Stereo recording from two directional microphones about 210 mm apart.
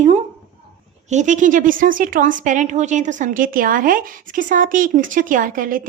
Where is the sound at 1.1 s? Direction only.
35° right (ahead or behind).